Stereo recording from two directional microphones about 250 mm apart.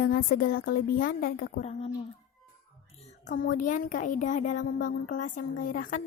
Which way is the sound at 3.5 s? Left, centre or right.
Left.